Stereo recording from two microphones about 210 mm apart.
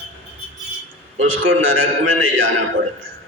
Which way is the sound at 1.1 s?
70° right (ahead or behind).